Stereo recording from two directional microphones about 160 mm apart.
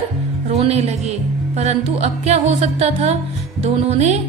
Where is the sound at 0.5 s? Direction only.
40° right (ahead or behind).